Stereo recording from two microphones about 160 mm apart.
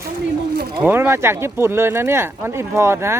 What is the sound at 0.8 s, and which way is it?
Speech, 10° right (ahead or behind).